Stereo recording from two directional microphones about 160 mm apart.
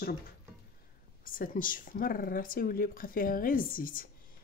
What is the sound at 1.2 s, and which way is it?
Speech, 60° left (ahead or behind).